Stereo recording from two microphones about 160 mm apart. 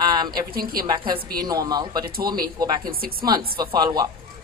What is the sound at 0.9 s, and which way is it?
Speech, 30° right (ahead or behind).